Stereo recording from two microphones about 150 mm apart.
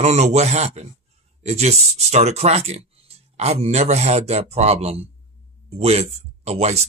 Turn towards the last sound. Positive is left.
turn(degrees=-45)  # may be behind; listen again after turning